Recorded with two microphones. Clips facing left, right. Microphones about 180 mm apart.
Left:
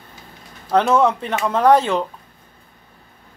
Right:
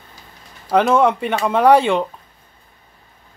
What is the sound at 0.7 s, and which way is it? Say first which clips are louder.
Speech: right 1 dB; 5° right (ahead or behind).